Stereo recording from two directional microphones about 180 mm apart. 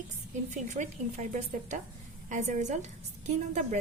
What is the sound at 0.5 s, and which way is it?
A woman's voice, 40° right (ahead or behind).